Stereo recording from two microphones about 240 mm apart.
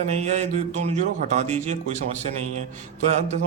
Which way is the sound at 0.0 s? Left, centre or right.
Right.